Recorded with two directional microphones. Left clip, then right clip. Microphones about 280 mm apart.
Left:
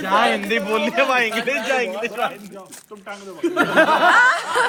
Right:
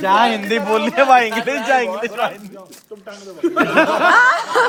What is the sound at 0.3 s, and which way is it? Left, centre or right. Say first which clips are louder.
A man's voice: right 3 dB; right.